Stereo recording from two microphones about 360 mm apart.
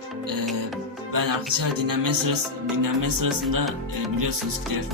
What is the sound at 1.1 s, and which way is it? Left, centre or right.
Music, right.